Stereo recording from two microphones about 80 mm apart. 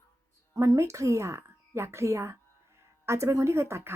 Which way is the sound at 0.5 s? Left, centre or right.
Right.